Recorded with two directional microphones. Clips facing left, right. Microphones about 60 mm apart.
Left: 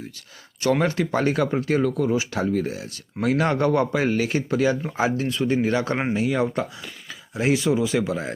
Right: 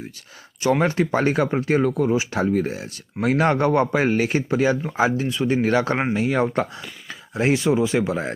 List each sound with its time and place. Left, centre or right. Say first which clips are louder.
0.6 s speech: right 2 dB; right
4.9 s speech: right 2 dB; centre
5.6 s speech: right 3 dB; right